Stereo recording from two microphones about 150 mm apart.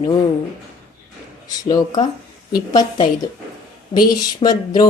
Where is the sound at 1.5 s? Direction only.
25° left (ahead or behind).